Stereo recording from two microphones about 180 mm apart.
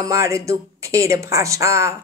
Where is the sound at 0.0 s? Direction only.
20° right (ahead or behind).